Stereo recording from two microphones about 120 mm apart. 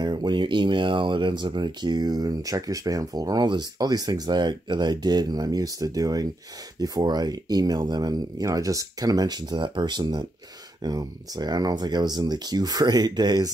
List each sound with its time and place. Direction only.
0.0 s speech: 40° right (ahead or behind)